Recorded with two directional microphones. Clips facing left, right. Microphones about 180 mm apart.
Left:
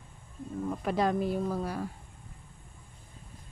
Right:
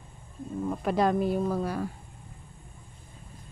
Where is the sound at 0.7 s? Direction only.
55° right (ahead or behind).